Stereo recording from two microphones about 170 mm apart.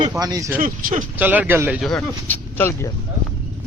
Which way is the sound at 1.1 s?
10° right (ahead or behind).